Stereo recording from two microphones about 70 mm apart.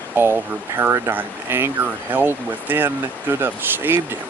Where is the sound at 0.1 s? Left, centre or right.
Right.